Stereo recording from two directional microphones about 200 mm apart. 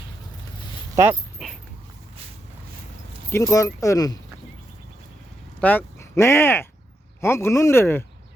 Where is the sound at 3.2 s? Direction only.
15° left (ahead or behind).